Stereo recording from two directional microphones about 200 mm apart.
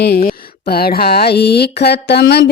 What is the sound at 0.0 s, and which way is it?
Speech, 50° left (ahead or behind).